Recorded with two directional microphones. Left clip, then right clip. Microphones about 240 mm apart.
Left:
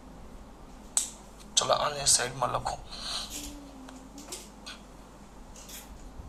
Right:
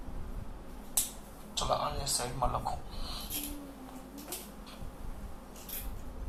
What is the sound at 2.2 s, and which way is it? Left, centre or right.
Speech, left.